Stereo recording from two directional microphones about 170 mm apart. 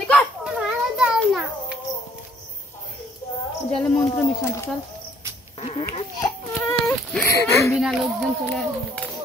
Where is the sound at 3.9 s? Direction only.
15° left (ahead or behind).